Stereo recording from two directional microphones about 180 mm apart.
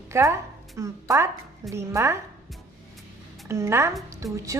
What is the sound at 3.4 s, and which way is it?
Speech, 15° right (ahead or behind).